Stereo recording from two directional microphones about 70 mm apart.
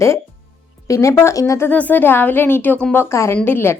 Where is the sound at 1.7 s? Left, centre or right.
Left.